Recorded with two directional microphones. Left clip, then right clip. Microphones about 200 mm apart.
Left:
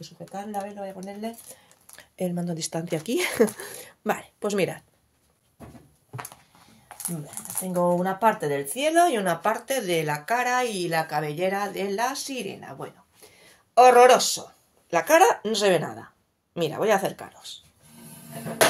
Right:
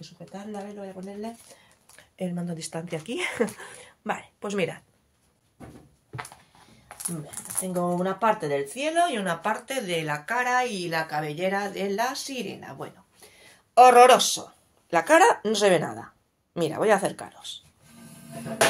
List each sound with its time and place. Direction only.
0.3 s speech: 55° left (ahead or behind)
2.1 s a woman's voice: 40° left (ahead or behind)
8.0 s a woman's voice: 40° left (ahead or behind); by 9.5 s 60° left (ahead or behind)
9.5 s a woman's voice: 50° left (ahead or behind); by 17.6 s centre (ahead or behind)